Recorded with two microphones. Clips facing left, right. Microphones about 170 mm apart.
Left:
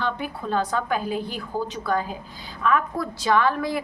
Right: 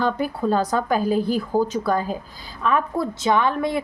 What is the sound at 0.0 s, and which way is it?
Speech, 40° right (ahead or behind).